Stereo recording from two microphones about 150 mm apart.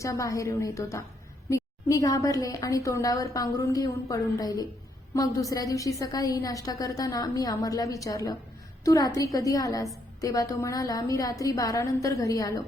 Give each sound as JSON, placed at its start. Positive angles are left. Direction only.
{"t": 0.0, "sound": "a woman's voice", "side_deg": 20}